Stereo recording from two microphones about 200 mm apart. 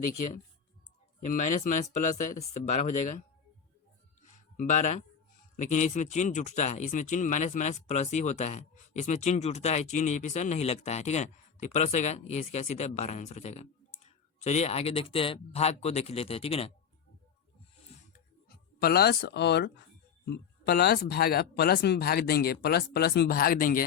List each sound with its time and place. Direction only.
1.3 s speech: 40° left (ahead or behind)
4.5 s speech: 35° left (ahead or behind)
18.1 s a sound: 50° left (ahead or behind)
20.2 s speech: 55° left (ahead or behind)